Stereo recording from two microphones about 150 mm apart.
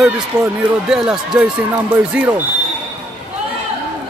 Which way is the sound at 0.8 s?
5° right (ahead or behind).